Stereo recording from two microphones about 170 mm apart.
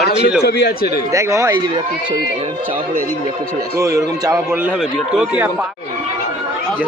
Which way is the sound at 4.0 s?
20° right (ahead or behind).